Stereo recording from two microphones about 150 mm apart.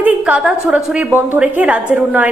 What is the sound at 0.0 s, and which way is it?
A woman's voice, 10° right (ahead or behind).